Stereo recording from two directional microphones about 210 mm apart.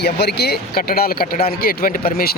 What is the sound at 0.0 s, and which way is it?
A man's voice, 50° left (ahead or behind).